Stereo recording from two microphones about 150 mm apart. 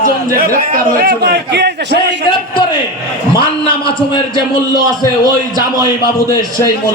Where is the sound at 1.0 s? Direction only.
90° right.